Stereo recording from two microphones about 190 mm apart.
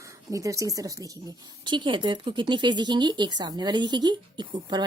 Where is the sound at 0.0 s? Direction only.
15° right (ahead or behind).